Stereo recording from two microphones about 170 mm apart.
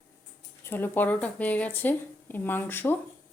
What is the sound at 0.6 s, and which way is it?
Speech, 10° left (ahead or behind).